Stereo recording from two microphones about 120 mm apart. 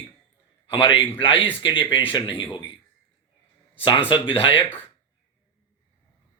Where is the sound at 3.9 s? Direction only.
45° left (ahead or behind).